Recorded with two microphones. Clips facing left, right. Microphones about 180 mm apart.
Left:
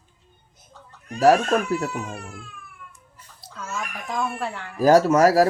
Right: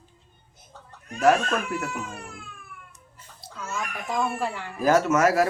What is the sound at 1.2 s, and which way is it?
Speech, 35° left (ahead or behind).